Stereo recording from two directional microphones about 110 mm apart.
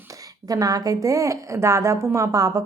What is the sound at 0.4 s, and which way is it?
A woman's voice, 35° right (ahead or behind).